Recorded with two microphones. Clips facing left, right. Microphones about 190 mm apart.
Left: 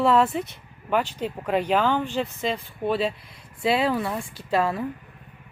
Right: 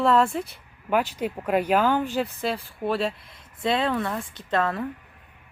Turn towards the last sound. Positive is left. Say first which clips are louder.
# left 1 dB
turn(degrees=5)  # may be behind; listen again after turning